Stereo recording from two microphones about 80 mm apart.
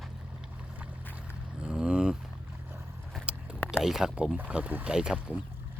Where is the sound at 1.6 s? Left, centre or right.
Centre.